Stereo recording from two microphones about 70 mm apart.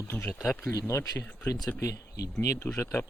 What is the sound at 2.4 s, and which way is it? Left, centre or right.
Speech, left.